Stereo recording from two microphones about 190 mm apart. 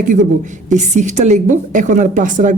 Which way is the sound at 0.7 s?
40° right (ahead or behind).